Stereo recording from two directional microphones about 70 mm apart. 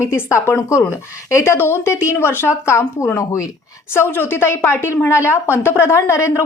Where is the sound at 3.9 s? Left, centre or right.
Left.